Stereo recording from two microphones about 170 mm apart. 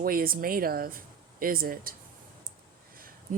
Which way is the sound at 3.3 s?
50° right (ahead or behind).